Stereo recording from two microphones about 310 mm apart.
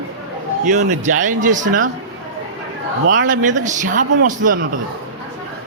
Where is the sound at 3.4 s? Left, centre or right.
Right.